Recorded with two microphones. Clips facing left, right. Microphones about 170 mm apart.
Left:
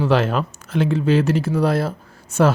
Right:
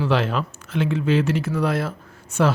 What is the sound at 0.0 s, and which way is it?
Speech, 45° left (ahead or behind).